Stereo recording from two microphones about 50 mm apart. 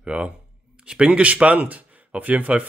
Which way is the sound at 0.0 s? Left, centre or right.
Right.